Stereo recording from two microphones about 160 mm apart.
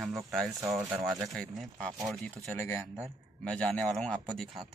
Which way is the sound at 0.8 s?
20° right (ahead or behind).